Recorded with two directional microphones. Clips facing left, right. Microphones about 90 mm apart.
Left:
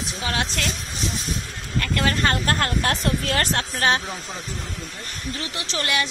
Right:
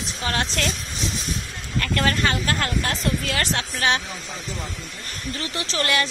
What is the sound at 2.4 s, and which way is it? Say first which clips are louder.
Speech: left 2 dB; 50° left (ahead or behind).